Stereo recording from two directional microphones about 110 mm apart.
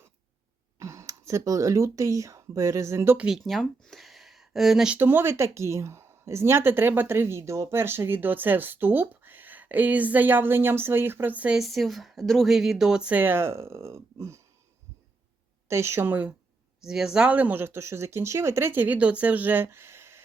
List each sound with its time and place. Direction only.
0.8 s speech: 25° right (ahead or behind)
3.2 s speech: 5° right (ahead or behind)
4.9 s speech: 20° right (ahead or behind)
11.6 s speech: centre (ahead or behind); by 14.4 s 25° right (ahead or behind)
15.7 s speech: 25° right (ahead or behind)
16.8 s speech: 5° right (ahead or behind); by 20.2 s 25° right (ahead or behind)